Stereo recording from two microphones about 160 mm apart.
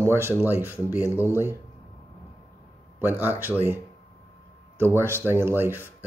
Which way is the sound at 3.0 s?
10° right (ahead or behind).